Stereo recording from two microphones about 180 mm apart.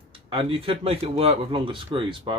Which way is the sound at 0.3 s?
30° right (ahead or behind).